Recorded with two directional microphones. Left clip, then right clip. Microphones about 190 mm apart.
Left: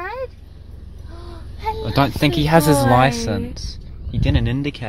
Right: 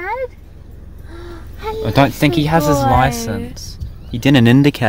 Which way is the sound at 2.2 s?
5° right (ahead or behind).